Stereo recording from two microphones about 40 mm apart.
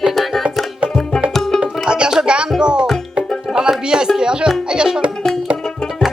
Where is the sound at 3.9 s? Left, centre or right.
Centre.